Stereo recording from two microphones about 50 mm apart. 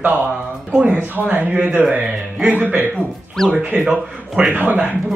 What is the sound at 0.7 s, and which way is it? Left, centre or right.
Speech, right.